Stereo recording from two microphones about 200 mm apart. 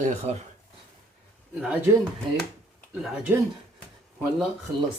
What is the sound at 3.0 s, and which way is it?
Speech, 5° right (ahead or behind).